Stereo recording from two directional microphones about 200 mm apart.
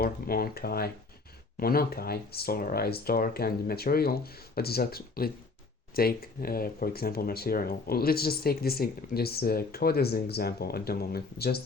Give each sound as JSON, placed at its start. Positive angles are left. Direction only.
{"t": 0.0, "sound": "speech", "side_deg": 50}